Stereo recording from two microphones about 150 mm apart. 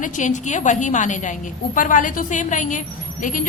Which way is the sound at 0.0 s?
55° left (ahead or behind).